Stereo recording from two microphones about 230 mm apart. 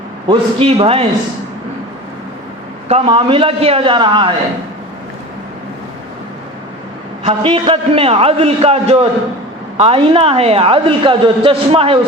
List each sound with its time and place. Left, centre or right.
0.3 s a woman's voice: right
2.9 s a woman's voice: right
7.3 s a woman's voice: right